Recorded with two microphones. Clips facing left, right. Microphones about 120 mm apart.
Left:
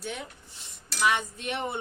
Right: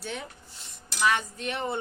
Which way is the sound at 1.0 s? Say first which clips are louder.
Right 1 dB; 20° left (ahead or behind).